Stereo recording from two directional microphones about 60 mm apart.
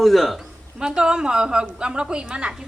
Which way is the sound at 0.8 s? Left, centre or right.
Centre.